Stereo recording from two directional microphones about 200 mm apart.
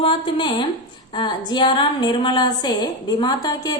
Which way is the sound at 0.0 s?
25° left (ahead or behind).